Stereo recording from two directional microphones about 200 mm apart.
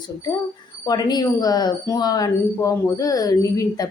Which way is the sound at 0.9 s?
20° left (ahead or behind).